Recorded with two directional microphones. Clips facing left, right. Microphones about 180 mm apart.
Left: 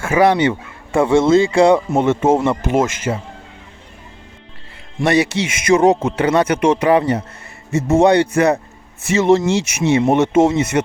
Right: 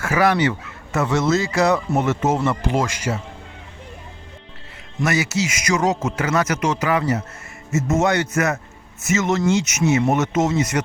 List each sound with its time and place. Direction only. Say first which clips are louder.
0.0 s speech: left 4 dB; 25° left (ahead or behind)
4.9 s speech: left 5 dB; 30° left (ahead or behind)